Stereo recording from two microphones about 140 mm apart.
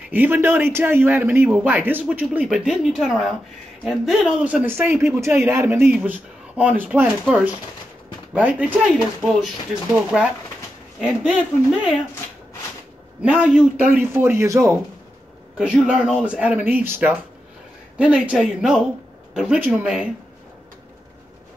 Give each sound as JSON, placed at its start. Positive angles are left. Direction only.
{"t": 0.1, "sound": "speech", "side_deg": -15}
{"t": 8.8, "sound": "speech", "side_deg": 0}
{"t": 13.2, "sound": "speech", "side_deg": -10}
{"t": 15.5, "sound": "speech", "side_deg": -5}